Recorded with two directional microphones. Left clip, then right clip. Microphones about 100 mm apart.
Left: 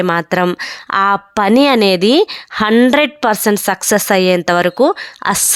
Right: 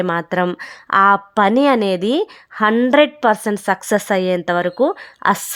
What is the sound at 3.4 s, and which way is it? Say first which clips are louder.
A woman's voice: left 4 dB; 25° left (ahead or behind).